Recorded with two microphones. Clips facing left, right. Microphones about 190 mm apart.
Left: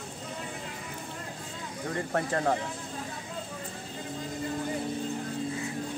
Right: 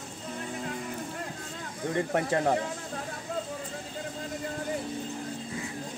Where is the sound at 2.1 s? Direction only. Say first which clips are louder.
Right 1 dB; 20° right (ahead or behind).